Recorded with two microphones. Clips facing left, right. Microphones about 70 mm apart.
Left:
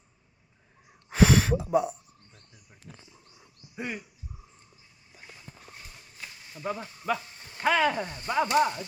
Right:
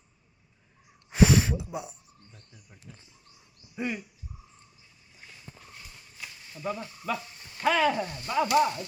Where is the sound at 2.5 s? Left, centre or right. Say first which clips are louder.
Left 1 dB; centre.